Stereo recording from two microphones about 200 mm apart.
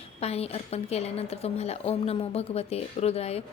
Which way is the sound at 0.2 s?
30° left (ahead or behind).